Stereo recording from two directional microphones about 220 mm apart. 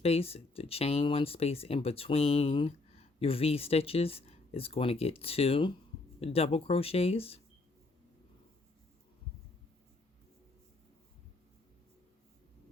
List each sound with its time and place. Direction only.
0.0 s speech: 25° left (ahead or behind)